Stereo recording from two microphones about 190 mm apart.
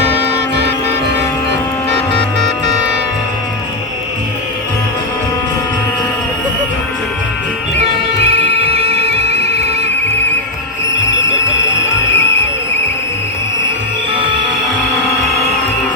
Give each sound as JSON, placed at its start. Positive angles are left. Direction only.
{"t": 8.2, "sound": "music", "side_deg": -30}
{"t": 10.9, "sound": "alarm", "side_deg": 70}
{"t": 12.1, "sound": "a sound", "side_deg": 70}